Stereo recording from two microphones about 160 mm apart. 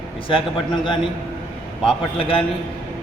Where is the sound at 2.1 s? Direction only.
35° left (ahead or behind).